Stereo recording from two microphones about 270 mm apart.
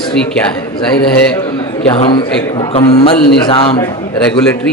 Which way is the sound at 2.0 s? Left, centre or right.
Centre.